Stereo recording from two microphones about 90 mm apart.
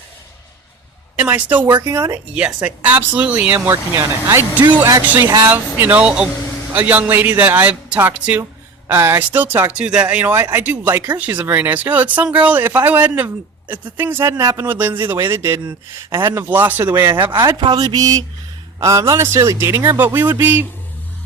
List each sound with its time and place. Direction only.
1.1 s speech: 15° right (ahead or behind)
3.7 s a man's voice: 35° right (ahead or behind)
5.0 s speech: 25° right (ahead or behind)
14.7 s a man's voice: 25° right (ahead or behind)
17.6 s a man's voice: 50° right (ahead or behind); by 20.7 s 20° right (ahead or behind)